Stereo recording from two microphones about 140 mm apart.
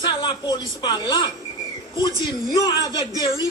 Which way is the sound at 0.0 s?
35° left (ahead or behind).